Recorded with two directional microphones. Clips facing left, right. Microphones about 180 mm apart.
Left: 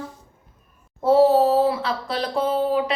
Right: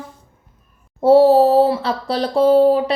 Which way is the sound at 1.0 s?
30° right (ahead or behind).